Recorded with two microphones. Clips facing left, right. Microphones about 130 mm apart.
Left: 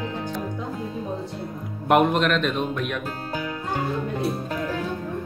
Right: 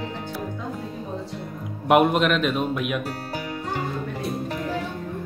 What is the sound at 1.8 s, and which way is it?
A woman's voice, 5° right (ahead or behind).